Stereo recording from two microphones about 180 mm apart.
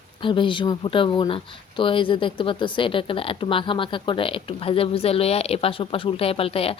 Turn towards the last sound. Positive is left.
turn(degrees=30)  # may be behind; listen again after turning